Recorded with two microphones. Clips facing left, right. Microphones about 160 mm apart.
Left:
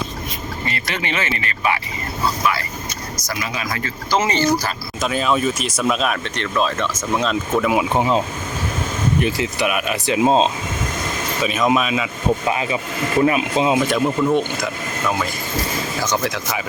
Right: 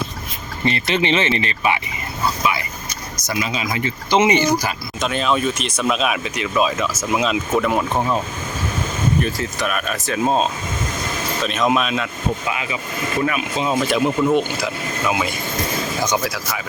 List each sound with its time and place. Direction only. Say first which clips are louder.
0.6 s speech: right 8 dB; 25° right (ahead or behind)
2.4 s vehicle: even; 20° right (ahead or behind)
3.2 s speech: right 3 dB; 25° right (ahead or behind)
4.9 s speech: left 1 dB; centre (ahead or behind)
7.9 s speech: left 2 dB; 15° left (ahead or behind)
9.2 s speech: left 3 dB; 15° left (ahead or behind)
11.4 s speech: left 1 dB; centre (ahead or behind)
12.5 s speech: left 4 dB; 35° left (ahead or behind)
13.7 s speech: even; centre (ahead or behind)